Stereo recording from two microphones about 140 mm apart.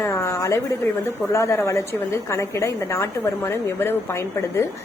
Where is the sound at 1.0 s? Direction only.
20° left (ahead or behind).